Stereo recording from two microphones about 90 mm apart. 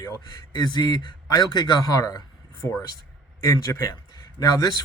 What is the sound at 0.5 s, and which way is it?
A man's voice, 50° left (ahead or behind).